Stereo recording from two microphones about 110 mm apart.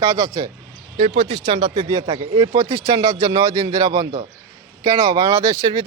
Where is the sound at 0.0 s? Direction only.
25° right (ahead or behind).